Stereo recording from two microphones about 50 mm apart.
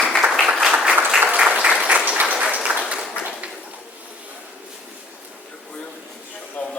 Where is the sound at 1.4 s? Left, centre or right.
Right.